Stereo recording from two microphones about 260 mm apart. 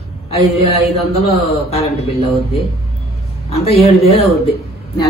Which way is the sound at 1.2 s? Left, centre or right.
Left.